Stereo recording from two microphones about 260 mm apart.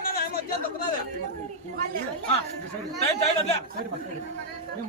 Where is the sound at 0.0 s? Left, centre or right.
Left.